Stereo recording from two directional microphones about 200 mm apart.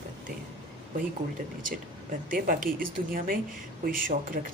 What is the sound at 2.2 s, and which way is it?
Speech, 45° right (ahead or behind).